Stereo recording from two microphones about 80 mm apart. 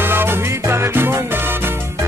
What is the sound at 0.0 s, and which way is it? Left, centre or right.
Music, right.